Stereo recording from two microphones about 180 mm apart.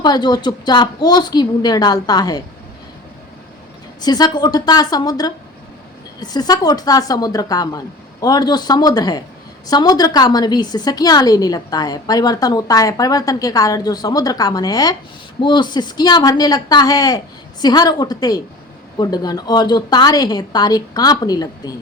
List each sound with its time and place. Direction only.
0.0 s a woman's voice: 25° left (ahead or behind)
4.0 s a woman's voice: 20° left (ahead or behind)